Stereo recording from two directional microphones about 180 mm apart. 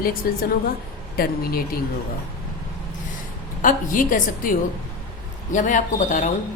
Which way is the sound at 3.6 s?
50° left (ahead or behind).